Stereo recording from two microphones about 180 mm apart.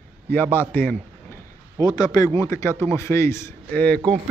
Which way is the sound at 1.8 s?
20° left (ahead or behind).